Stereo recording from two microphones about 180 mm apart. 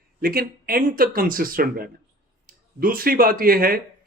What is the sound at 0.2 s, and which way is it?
Speech, 55° right (ahead or behind).